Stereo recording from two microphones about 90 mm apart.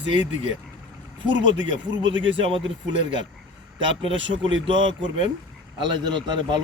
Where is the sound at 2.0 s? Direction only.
65° right (ahead or behind).